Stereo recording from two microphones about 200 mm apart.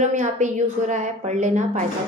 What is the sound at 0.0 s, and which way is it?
A woman's voice, 35° right (ahead or behind).